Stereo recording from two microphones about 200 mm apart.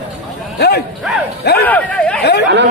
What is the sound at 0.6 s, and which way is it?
Speech, 55° left (ahead or behind).